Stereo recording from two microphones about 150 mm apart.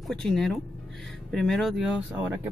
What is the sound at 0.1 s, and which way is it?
Speech, 5° left (ahead or behind).